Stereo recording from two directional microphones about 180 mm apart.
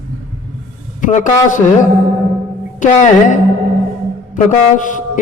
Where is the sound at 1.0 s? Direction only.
45° left (ahead or behind).